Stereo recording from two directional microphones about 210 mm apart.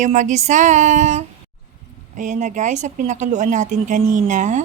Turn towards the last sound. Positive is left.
turn(degrees=-35)  # may be behind; listen again after turning